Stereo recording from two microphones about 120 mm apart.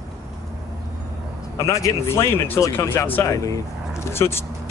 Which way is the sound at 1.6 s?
25° left (ahead or behind).